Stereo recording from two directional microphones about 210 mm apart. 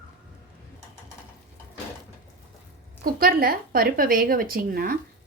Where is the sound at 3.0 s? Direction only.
45° right (ahead or behind).